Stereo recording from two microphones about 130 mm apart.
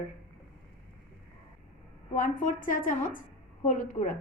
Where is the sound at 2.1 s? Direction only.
80° left.